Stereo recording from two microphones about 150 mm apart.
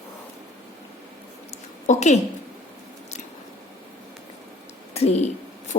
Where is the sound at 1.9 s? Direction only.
50° left (ahead or behind).